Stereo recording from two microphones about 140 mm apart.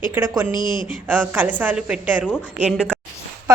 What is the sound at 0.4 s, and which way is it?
Speech, 80° right.